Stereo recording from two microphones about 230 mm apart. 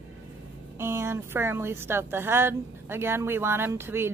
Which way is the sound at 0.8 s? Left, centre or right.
Centre.